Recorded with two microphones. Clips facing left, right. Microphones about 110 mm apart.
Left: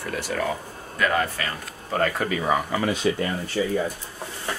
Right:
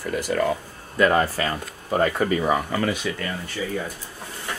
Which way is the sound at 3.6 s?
40° left (ahead or behind).